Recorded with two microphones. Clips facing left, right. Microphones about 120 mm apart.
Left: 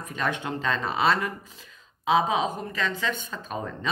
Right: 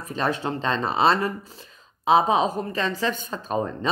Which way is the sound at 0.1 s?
35° right (ahead or behind).